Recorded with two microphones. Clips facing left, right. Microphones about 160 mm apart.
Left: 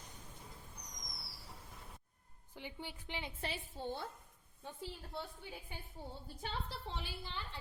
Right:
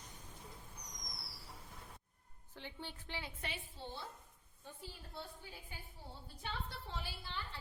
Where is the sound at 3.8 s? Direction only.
50° left (ahead or behind).